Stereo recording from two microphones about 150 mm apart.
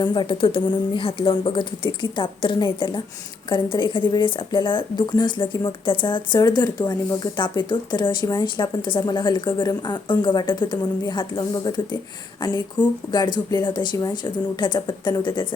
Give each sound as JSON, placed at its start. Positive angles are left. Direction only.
{"t": 0.0, "sound": "a woman's voice", "side_deg": 30}